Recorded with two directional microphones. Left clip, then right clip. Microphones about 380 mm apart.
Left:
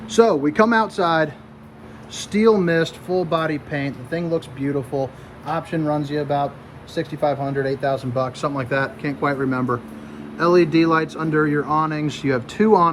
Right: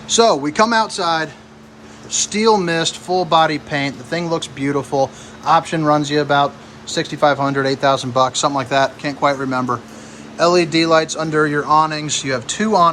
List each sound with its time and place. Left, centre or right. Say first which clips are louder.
0.1 s speech: right 2 dB; centre